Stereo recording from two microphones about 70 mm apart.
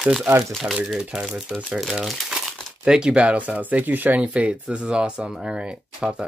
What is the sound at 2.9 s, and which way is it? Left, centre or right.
Speech, centre.